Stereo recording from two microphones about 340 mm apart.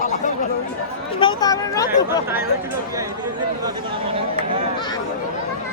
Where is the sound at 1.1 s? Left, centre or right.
Centre.